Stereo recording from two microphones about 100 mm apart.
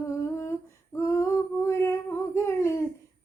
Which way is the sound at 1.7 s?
25° left (ahead or behind).